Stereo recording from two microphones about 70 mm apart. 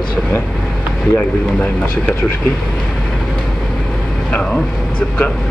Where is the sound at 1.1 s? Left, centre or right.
Centre.